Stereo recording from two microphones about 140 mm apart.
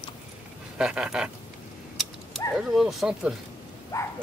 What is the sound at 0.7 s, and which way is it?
Speech, 5° right (ahead or behind).